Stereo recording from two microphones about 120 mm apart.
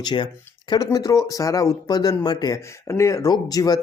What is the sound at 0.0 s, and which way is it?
Speech, 40° left (ahead or behind).